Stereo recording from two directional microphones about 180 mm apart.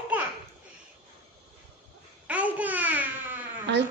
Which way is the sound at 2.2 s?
10° right (ahead or behind).